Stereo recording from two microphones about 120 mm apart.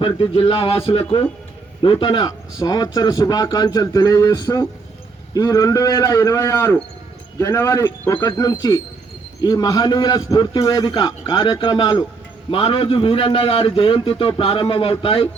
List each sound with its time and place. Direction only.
0.0 s a man's voice: 45° left (ahead or behind)
2.2 s speech: 30° left (ahead or behind)
8.1 s speech: 35° left (ahead or behind)
12.5 s a man's voice: 50° left (ahead or behind)